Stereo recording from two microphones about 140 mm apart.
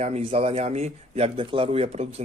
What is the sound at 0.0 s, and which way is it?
Speech, 50° right (ahead or behind).